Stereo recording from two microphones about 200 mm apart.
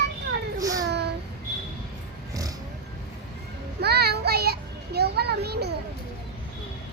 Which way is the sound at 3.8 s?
55° right (ahead or behind).